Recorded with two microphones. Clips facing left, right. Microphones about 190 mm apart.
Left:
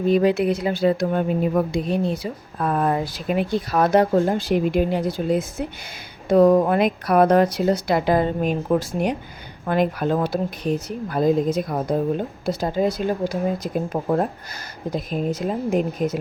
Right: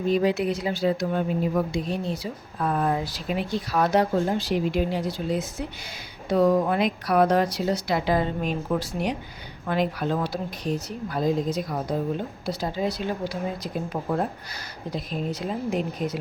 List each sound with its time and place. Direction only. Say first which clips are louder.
0.1 s speech: left 4 dB; 60° left (ahead or behind)